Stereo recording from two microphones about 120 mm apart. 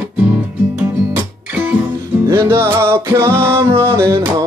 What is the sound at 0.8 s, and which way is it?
Music, 15° right (ahead or behind).